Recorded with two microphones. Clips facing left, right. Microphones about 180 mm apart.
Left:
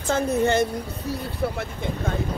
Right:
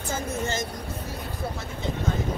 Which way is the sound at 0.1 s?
65° left (ahead or behind).